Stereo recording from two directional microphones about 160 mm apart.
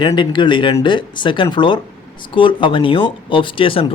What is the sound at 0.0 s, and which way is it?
Speech, 30° left (ahead or behind).